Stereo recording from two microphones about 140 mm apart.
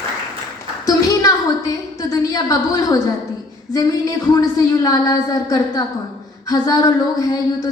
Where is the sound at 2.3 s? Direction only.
25° left (ahead or behind).